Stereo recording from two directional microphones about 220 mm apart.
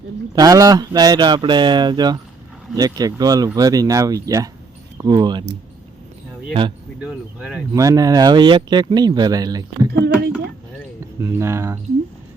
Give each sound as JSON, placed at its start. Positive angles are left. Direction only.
{"t": 0.3, "sound": "speech", "side_deg": -15}
{"t": 6.5, "sound": "speech", "side_deg": -20}
{"t": 7.0, "sound": "speech", "side_deg": -5}
{"t": 7.7, "sound": "speech", "side_deg": -15}
{"t": 11.2, "sound": "speech", "side_deg": -10}